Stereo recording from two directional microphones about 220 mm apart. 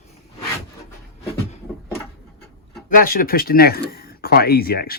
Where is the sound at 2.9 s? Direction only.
40° left (ahead or behind).